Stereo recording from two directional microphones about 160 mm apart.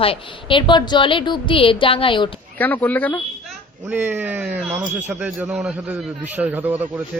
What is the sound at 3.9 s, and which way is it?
A man's voice, 10° right (ahead or behind).